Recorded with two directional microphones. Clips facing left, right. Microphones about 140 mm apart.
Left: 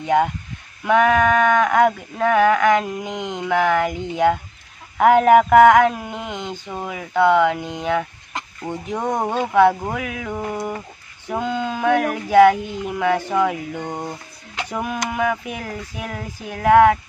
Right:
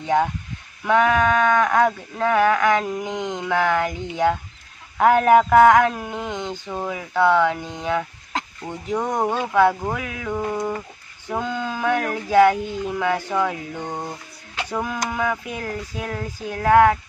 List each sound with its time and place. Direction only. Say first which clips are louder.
0.0 s speech: left 2 dB; 10° left (ahead or behind)
9.3 s speech: left 4 dB; 15° left (ahead or behind)
14.7 s speech: left 1 dB; 15° left (ahead or behind)